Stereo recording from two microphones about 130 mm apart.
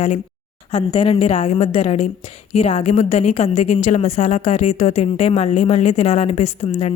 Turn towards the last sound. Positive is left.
turn(degrees=55)  # may be behind; listen again after turning